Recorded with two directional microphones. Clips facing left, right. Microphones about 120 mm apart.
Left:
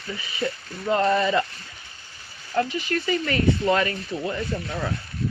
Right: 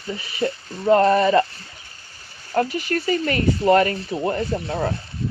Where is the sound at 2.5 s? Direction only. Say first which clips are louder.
Right 3 dB; 40° right (ahead or behind).